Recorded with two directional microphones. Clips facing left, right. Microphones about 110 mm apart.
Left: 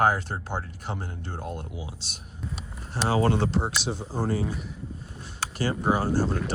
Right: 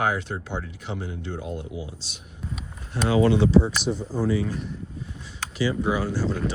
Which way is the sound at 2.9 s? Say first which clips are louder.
Right 4 dB; 35° left (ahead or behind).